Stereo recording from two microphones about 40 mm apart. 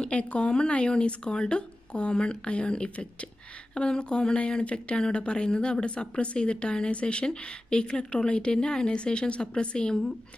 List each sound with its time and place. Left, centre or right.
0.0 s speech: left